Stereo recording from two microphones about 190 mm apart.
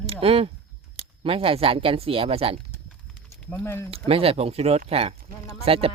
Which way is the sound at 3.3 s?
10° left (ahead or behind).